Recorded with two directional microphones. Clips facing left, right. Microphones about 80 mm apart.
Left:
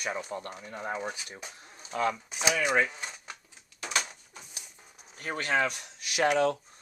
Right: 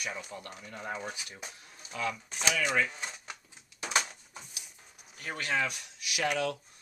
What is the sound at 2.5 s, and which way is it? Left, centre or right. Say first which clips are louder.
Speech: left 3 dB; centre.